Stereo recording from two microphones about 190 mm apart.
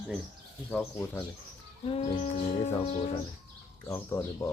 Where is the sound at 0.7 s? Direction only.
10° left (ahead or behind).